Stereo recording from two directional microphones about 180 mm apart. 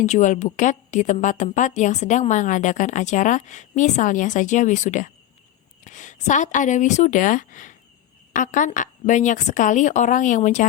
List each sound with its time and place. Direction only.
0.0 s a woman's voice: 40° left (ahead or behind)